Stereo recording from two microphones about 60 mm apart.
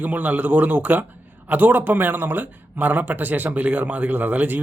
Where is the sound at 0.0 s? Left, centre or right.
Right.